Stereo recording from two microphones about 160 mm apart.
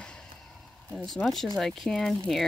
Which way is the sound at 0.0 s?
5° left (ahead or behind).